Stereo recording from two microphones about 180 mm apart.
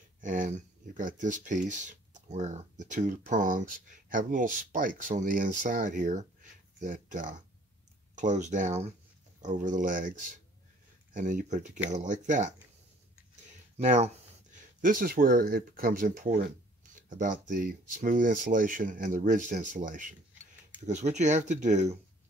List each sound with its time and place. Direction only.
0.2 s speech: 45° right (ahead or behind)
11.1 s speech: 45° right (ahead or behind)
13.7 s speech: 40° right (ahead or behind)